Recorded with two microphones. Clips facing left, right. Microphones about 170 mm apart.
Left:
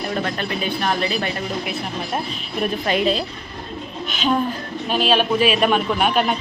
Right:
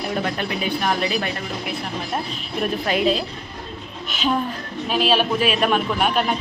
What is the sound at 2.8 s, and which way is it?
A man's voice, centre (ahead or behind).